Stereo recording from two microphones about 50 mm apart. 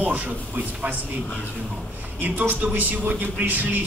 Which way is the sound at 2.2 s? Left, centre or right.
Right.